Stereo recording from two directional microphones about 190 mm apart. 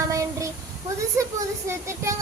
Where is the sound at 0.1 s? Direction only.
15° right (ahead or behind).